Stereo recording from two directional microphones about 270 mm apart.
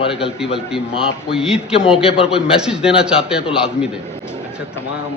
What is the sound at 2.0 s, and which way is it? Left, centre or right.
Speech, left.